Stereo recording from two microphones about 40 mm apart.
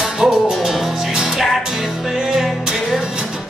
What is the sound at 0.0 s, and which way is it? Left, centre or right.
Music, centre.